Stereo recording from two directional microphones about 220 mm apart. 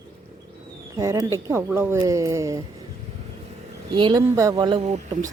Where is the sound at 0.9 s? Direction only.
15° right (ahead or behind).